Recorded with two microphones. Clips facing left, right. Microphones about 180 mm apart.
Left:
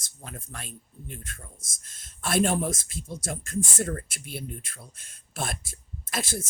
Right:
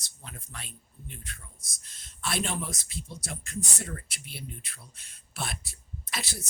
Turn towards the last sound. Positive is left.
turn(degrees=50)  # may be behind; listen again after turning